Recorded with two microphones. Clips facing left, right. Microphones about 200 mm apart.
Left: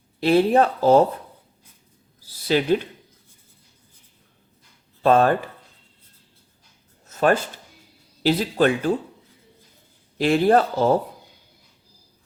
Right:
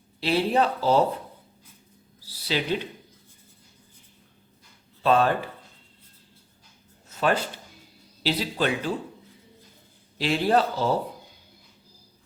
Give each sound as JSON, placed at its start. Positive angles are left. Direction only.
{"t": 0.2, "sound": "speech", "side_deg": 50}
{"t": 2.4, "sound": "a man's voice", "side_deg": 50}
{"t": 5.0, "sound": "speech", "side_deg": 50}
{"t": 7.2, "sound": "speech", "side_deg": 45}
{"t": 10.2, "sound": "speech", "side_deg": 50}